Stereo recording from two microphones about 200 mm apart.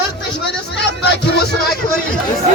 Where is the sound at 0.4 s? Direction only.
60° left (ahead or behind).